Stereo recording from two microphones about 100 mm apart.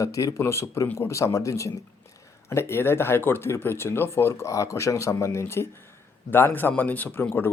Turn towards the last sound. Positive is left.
turn(degrees=20)  # may be behind; listen again after turning